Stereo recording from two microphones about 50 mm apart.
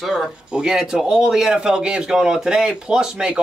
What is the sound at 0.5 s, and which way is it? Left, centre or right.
Speech, centre.